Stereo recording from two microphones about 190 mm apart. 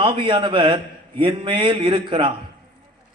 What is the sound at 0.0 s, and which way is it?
Speech, 25° right (ahead or behind).